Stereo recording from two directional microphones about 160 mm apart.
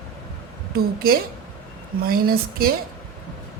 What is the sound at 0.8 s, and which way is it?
Speech, 70° right (ahead or behind).